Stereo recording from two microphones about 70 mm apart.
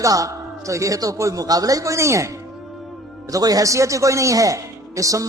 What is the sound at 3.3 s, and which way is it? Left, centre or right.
Speech, right.